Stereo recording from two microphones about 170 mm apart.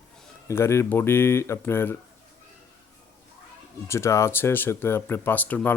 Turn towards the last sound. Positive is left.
turn(degrees=10)  # may be behind; listen again after turning